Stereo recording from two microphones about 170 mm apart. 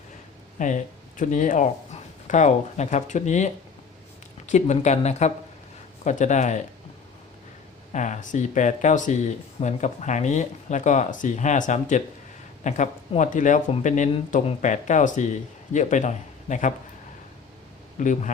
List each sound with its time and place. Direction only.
0.6 s speech: 50° left (ahead or behind)
7.9 s speech: 45° left (ahead or behind)
18.0 s speech: 45° left (ahead or behind)